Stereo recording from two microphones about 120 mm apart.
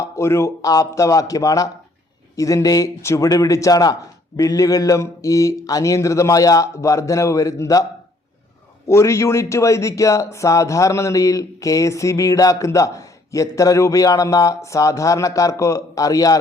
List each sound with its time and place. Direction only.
0.0 s speech: 20° left (ahead or behind)
8.9 s speech: 25° left (ahead or behind)